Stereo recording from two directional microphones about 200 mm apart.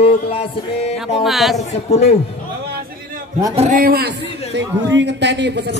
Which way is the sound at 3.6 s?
40° right (ahead or behind).